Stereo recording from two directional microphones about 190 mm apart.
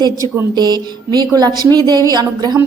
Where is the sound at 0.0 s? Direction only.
20° right (ahead or behind).